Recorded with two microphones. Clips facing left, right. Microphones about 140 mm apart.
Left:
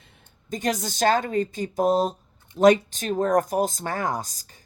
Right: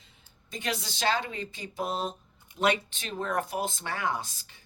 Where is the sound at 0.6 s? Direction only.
45° left (ahead or behind).